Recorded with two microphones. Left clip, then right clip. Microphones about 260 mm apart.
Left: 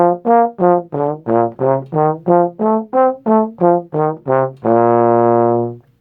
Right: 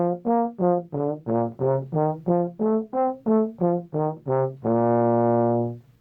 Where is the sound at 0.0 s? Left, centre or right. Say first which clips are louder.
Left 12 dB; left.